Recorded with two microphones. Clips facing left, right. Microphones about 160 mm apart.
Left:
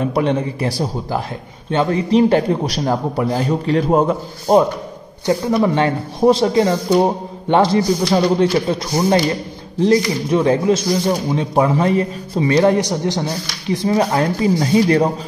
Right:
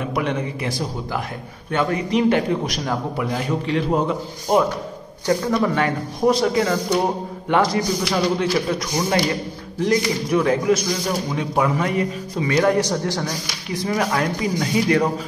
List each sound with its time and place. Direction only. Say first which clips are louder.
0.0 s a man's voice: left 6 dB; 30° left (ahead or behind)
5.2 s speech: left 3 dB; 20° left (ahead or behind)
12.7 s speech: left 3 dB; 20° left (ahead or behind)